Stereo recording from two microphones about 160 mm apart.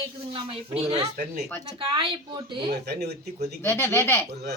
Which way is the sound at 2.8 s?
90° right.